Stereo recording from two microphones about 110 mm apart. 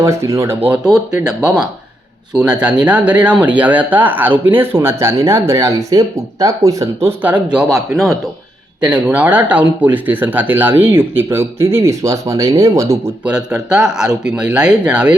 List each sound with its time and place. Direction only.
0.0 s speech: 25° right (ahead or behind)
0.9 s speech: 5° right (ahead or behind)
7.4 s speech: 5° right (ahead or behind)
8.8 s speech: 10° right (ahead or behind); by 13.1 s 30° right (ahead or behind)
13.2 s speech: 10° right (ahead or behind)